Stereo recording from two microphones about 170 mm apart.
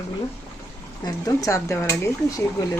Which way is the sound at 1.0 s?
20° left (ahead or behind).